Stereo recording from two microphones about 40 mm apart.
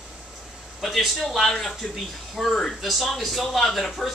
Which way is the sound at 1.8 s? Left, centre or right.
Centre.